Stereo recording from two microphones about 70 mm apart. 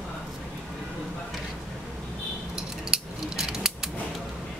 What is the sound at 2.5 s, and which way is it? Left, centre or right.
Cutlery, centre.